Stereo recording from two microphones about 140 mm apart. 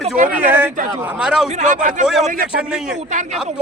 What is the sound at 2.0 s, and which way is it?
Speech, centre (ahead or behind).